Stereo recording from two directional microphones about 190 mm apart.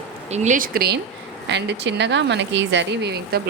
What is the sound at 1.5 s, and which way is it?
Speech, 65° right (ahead or behind).